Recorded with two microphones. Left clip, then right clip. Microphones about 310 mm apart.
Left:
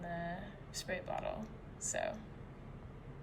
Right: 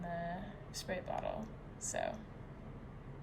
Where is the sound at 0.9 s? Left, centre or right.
Centre.